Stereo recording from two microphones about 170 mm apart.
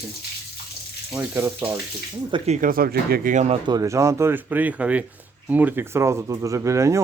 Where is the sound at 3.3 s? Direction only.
45° right (ahead or behind).